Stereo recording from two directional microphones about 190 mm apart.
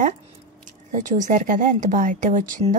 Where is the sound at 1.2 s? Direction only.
40° right (ahead or behind).